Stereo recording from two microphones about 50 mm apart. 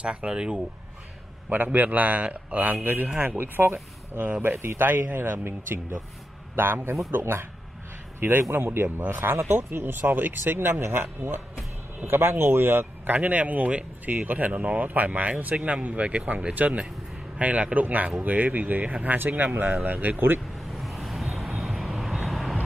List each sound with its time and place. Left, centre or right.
0.0 s speech: right
1.5 s a man's voice: right
4.3 s a man's voice: right
13.1 s a man's voice: right
20.7 s vehicle: centre